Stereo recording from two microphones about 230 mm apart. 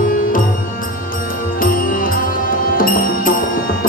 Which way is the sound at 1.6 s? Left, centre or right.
Left.